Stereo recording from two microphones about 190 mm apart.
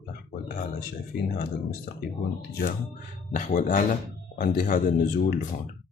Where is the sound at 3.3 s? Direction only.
40° left (ahead or behind).